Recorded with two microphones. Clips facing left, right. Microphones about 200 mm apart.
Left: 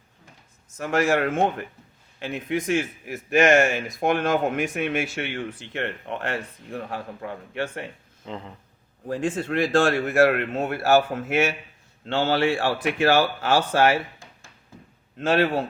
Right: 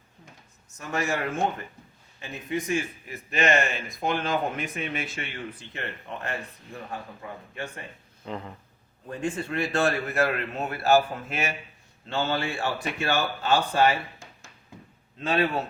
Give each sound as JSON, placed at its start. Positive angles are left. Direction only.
{"t": 0.8, "sound": "a man's voice", "side_deg": 90}
{"t": 8.2, "sound": "a sound", "side_deg": 20}
{"t": 9.0, "sound": "a man's voice", "side_deg": 90}
{"t": 15.2, "sound": "a man's voice", "side_deg": 80}